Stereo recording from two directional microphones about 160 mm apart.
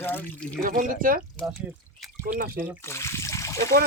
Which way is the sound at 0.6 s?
60° right (ahead or behind).